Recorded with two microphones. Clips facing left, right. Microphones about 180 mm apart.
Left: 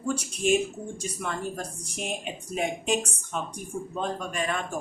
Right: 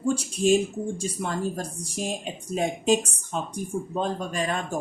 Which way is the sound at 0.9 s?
30° right (ahead or behind).